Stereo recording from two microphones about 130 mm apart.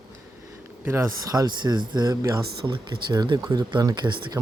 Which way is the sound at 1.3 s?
30° right (ahead or behind).